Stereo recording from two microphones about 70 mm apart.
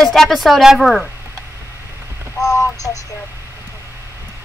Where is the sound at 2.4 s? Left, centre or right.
Left.